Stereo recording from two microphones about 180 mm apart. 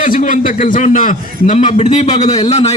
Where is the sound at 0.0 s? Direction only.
45° left (ahead or behind).